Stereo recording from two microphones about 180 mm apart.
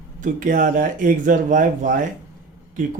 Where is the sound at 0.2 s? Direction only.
45° right (ahead or behind).